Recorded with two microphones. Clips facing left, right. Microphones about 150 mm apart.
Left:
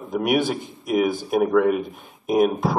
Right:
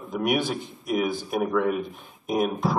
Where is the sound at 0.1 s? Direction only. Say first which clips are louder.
Left 4 dB; 50° left (ahead or behind).